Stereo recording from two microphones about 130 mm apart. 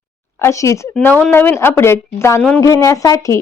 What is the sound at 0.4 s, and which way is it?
Speech, 25° left (ahead or behind).